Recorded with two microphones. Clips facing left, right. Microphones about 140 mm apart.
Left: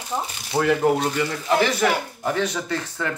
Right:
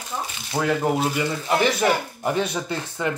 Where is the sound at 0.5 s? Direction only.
5° right (ahead or behind).